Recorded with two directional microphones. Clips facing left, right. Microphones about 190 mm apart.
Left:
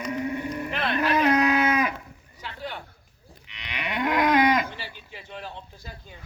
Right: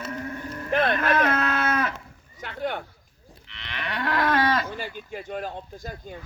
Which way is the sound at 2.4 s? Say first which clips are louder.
Right 6 dB; 55° right (ahead or behind).